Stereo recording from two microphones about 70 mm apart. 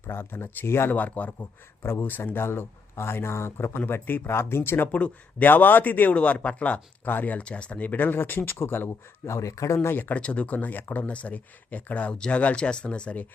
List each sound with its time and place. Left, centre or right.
0.1 s speech: left
0.9 s speech: left
4.9 s speech: centre
10.2 s speech: centre